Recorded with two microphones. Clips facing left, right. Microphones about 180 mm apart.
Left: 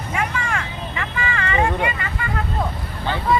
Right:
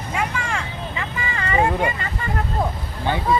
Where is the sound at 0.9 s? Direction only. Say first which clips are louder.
Left 4 dB; 25° right (ahead or behind).